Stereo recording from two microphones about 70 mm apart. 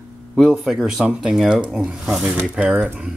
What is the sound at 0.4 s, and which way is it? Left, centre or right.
Speech, centre.